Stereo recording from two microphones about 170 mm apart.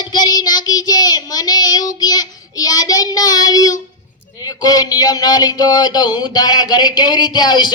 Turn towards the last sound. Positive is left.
turn(degrees=25)  # may be behind; listen again after turning